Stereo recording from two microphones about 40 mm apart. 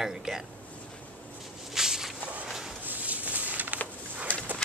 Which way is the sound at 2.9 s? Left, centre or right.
Right.